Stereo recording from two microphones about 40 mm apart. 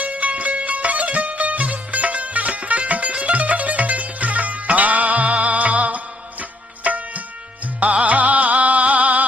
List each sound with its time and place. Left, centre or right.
0.0 s music: right